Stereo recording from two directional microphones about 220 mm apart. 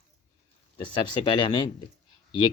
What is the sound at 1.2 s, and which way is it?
Speech, 20° left (ahead or behind).